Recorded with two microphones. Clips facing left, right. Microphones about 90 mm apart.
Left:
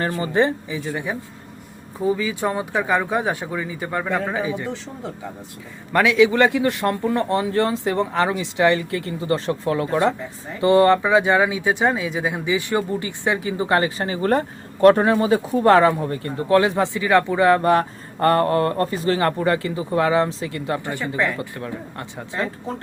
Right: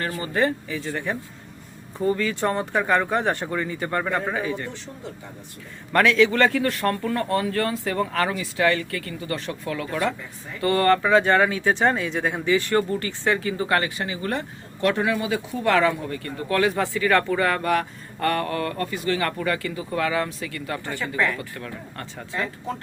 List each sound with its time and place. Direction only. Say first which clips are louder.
0.0 s speech: left 4 dB; 25° left (ahead or behind)
5.9 s speech: left 2 dB; 10° left (ahead or behind)
14.0 s speech: left 7 dB; 35° left (ahead or behind); by 17.6 s 20° left (ahead or behind)
17.6 s speech: left 5 dB; 30° left (ahead or behind)